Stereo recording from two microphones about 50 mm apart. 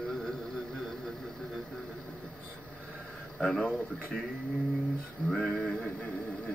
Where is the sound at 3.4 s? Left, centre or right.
Centre.